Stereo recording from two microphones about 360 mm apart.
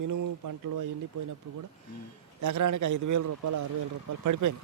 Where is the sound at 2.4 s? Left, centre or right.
Right.